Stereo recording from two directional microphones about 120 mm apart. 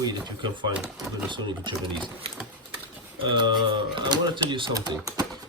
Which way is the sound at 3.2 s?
45° right (ahead or behind).